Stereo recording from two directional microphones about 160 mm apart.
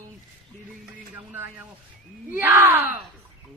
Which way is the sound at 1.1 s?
10° right (ahead or behind).